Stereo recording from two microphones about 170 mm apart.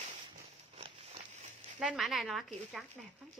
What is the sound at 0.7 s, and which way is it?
Walk, 35° right (ahead or behind).